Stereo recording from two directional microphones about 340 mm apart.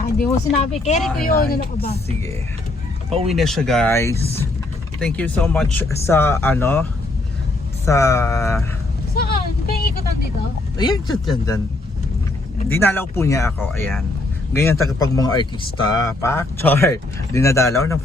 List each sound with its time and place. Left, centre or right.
0.2 s speech: centre
3.2 s speech: centre
7.9 s speech: centre
9.1 s vehicle: left
11.3 s speech: centre
12.7 s speech: centre